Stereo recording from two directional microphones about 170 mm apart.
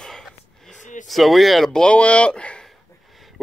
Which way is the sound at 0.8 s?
45° left (ahead or behind).